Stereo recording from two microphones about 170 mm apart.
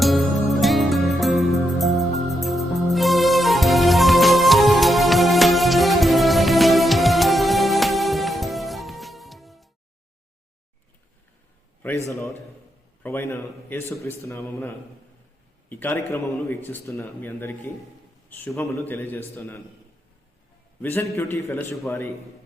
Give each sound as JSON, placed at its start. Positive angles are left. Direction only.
{"t": 0.0, "sound": "music", "side_deg": 0}
{"t": 13.0, "sound": "a man's voice", "side_deg": 15}
{"t": 15.7, "sound": "a man's voice", "side_deg": 15}
{"t": 20.8, "sound": "a man's voice", "side_deg": 15}